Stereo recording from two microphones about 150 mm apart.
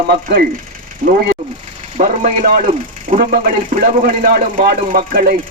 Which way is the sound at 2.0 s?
65° right (ahead or behind).